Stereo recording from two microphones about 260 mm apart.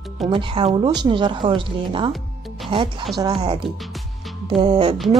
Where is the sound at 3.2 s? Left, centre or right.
Centre.